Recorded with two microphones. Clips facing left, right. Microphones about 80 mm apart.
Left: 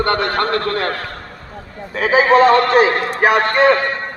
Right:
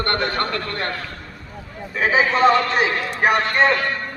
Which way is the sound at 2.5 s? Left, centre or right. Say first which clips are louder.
Left 6 dB; left.